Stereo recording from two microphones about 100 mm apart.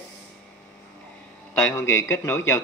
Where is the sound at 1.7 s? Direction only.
25° left (ahead or behind).